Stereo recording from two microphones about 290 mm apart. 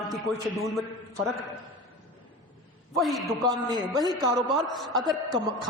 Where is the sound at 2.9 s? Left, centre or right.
Centre.